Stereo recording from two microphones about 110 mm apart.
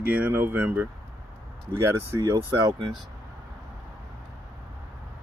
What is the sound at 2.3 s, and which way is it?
Speech, 30° right (ahead or behind).